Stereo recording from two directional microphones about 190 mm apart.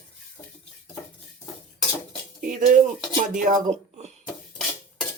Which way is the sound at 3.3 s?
40° right (ahead or behind).